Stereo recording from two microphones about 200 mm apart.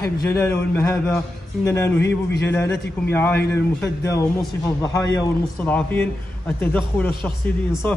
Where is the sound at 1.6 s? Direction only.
15° left (ahead or behind).